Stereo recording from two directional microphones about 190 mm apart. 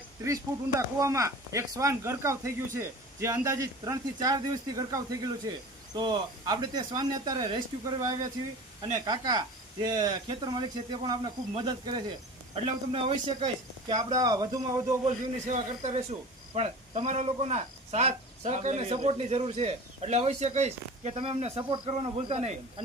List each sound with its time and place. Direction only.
0.9 s speech: 15° right (ahead or behind)
15.0 s speech: 40° right (ahead or behind)